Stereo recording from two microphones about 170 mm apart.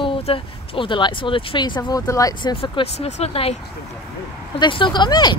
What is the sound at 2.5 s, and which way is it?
Speech, 35° left (ahead or behind).